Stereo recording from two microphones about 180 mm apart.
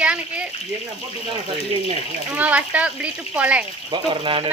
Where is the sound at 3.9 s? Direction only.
30° right (ahead or behind).